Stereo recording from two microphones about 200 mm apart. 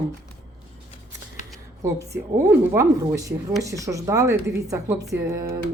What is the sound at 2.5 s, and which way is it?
Speech, 10° right (ahead or behind).